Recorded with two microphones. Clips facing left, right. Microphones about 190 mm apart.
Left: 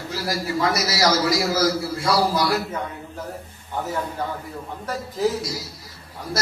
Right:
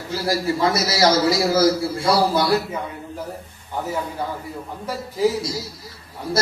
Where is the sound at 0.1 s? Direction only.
25° right (ahead or behind).